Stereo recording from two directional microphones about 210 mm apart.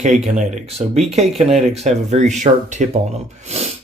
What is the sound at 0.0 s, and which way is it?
Speech, 35° right (ahead or behind).